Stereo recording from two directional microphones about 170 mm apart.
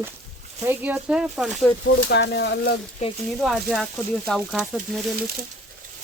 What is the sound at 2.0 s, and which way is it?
Speech, 90° left.